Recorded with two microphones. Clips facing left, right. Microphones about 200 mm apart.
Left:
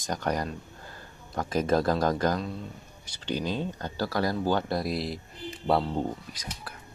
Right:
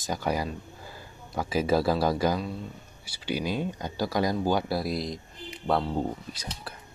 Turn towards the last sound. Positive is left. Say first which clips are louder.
# right 4 dB
turn(degrees=-25)  # may be behind; listen again after turning